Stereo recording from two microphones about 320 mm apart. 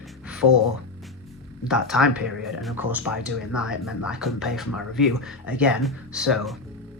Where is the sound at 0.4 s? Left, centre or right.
Left.